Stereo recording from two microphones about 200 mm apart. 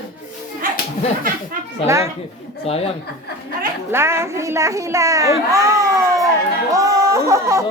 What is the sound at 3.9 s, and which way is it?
Speech, 10° right (ahead or behind).